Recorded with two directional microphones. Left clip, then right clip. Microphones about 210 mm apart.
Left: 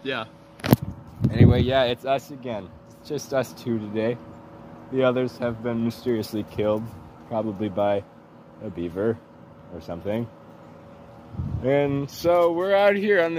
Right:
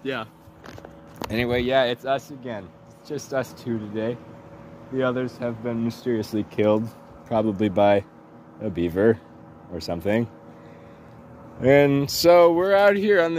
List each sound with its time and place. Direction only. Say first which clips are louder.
0.0 s speech: even; 35° right (ahead or behind)
1.7 s speech: even; 10° right (ahead or behind)
6.3 s speech: right 3 dB; 50° right (ahead or behind)
11.6 s speech: right 5 dB; 55° right (ahead or behind)
12.5 s speech: right 2 dB; 25° right (ahead or behind)